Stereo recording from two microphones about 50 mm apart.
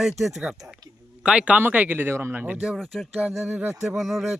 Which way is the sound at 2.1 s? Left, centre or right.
Right.